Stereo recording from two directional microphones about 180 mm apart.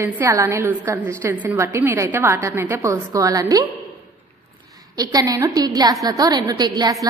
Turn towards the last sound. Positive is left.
turn(degrees=-20)  # may be behind; listen again after turning